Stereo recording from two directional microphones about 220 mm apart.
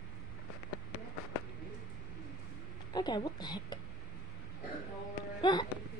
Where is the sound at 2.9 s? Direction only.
20° left (ahead or behind).